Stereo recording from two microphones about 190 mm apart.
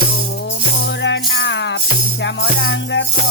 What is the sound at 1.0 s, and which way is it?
Music, 70° left (ahead or behind).